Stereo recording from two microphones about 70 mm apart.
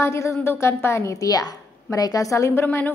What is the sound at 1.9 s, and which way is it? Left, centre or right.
Speech, left.